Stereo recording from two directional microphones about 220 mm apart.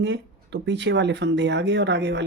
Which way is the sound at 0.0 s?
55° right (ahead or behind).